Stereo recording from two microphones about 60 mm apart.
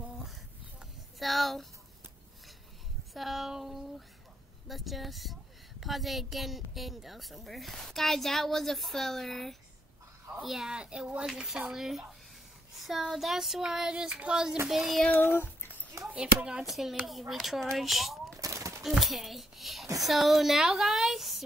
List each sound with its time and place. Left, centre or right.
1.2 s a woman's voice: centre
3.1 s a woman's voice: centre
10.4 s child singing: centre
12.7 s a child's voice: centre
13.1 s child singing: centre
14.7 s a woman's voice: centre
15.1 s a sound: left
16.1 s child singing: centre
16.6 s a woman's voice: centre
18.3 s a sound: right
18.8 s a child's voice: centre